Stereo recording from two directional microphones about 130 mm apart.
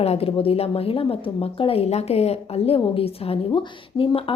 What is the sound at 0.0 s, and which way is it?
A woman's voice, 50° left (ahead or behind).